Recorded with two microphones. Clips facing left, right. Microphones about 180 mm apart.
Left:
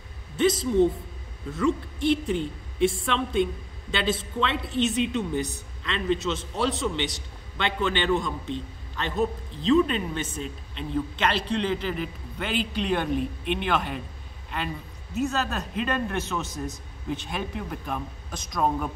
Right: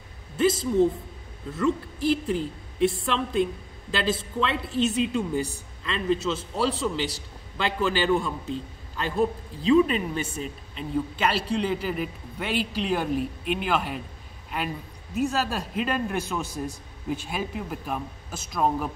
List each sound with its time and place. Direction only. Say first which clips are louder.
0.4 s a man's voice: even; 5° right (ahead or behind)